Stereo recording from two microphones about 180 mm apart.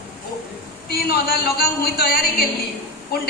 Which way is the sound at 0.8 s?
60° left (ahead or behind).